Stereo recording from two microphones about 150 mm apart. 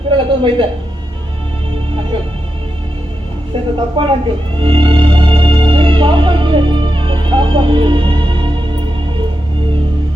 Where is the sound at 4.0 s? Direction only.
35° right (ahead or behind).